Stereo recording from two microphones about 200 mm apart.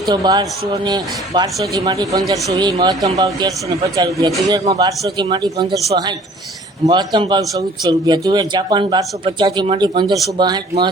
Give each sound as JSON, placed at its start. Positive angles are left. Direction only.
{"t": 0.1, "sound": "a man's voice", "side_deg": -20}